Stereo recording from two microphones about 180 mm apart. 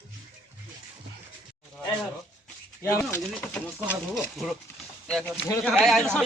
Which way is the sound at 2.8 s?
15° left (ahead or behind).